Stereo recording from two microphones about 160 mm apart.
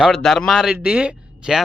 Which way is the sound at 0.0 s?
Centre (ahead or behind).